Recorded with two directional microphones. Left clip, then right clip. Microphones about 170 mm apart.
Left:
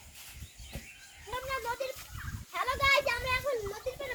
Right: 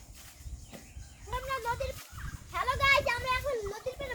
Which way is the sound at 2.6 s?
10° left (ahead or behind).